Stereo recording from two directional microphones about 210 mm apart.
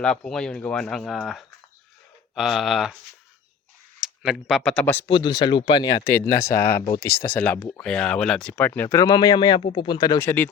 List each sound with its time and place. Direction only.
0.3 s speech: 5° left (ahead or behind)
4.0 s speech: 5° right (ahead or behind)
5.0 s speech: 20° left (ahead or behind)